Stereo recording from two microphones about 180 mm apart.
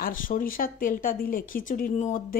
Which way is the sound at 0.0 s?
50° left (ahead or behind).